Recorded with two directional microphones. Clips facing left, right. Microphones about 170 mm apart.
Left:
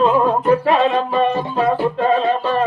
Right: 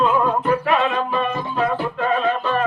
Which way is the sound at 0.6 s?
30° left (ahead or behind).